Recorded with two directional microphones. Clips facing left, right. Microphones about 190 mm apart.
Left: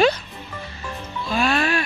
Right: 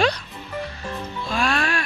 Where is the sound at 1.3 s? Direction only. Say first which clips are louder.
Left 3 dB; 5° left (ahead or behind).